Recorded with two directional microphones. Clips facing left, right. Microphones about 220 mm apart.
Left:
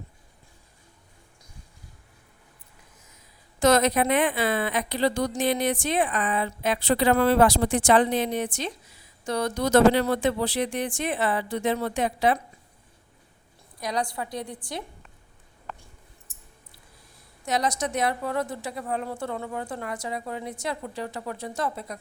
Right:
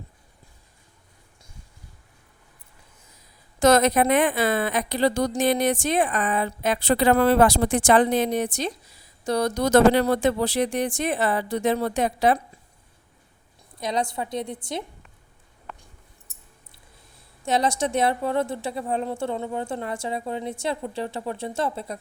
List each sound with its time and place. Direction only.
3.6 s speech: 45° right (ahead or behind)
13.7 s a woman's voice: 25° right (ahead or behind)
17.4 s a woman's voice: 30° right (ahead or behind)